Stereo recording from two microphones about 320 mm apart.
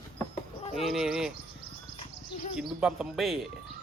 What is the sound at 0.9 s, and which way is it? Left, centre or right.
Speech, centre.